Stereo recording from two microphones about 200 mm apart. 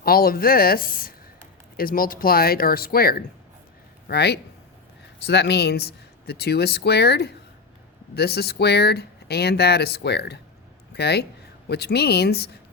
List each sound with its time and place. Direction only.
0.0 s speech: 50° left (ahead or behind)